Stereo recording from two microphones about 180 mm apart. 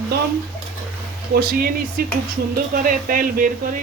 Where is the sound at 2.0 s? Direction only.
55° right (ahead or behind).